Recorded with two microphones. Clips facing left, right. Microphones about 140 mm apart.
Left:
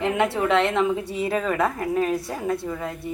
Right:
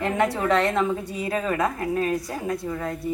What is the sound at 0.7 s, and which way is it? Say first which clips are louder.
Speech: left 1 dB; 10° left (ahead or behind).